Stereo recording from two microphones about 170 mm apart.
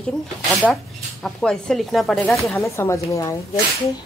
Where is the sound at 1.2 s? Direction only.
5° left (ahead or behind).